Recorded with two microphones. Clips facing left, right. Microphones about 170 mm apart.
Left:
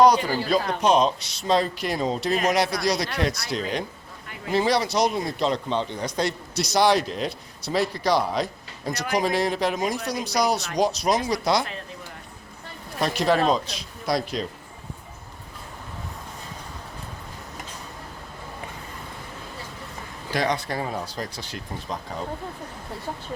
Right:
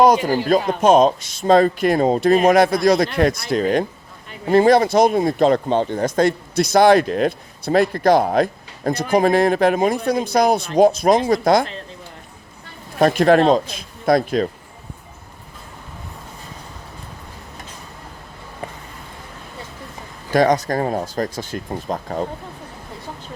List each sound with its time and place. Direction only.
0.0 s speech: 50° right (ahead or behind)
13.0 s a man's voice: 50° right (ahead or behind)
20.3 s speech: 45° right (ahead or behind)